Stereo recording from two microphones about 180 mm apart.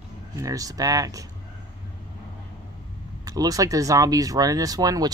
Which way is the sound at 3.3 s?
20° right (ahead or behind).